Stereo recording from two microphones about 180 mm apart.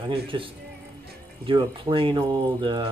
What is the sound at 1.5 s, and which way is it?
Speech, 30° right (ahead or behind).